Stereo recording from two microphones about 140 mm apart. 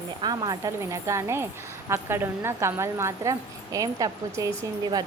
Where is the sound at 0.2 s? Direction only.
30° right (ahead or behind).